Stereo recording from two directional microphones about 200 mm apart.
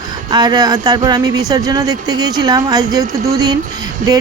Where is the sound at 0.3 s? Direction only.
20° right (ahead or behind).